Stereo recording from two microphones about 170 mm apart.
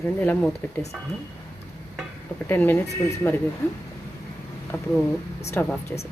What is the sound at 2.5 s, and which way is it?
Speech, 10° left (ahead or behind).